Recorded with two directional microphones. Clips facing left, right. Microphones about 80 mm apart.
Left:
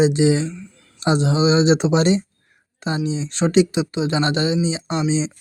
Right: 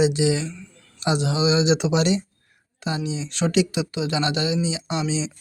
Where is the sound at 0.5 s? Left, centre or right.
Centre.